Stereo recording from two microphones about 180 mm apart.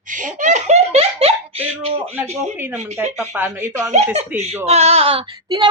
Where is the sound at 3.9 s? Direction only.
40° right (ahead or behind).